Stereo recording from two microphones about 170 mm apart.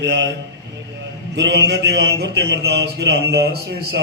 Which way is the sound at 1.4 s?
90° right.